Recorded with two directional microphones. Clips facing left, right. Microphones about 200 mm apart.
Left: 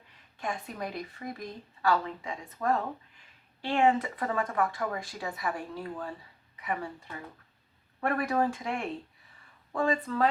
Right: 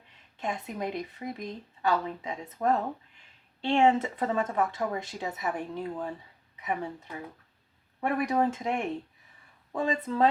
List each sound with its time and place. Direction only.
0.3 s speech: 20° right (ahead or behind)